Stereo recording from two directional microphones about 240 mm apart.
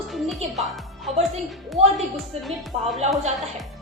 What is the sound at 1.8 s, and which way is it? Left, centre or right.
Speech, right.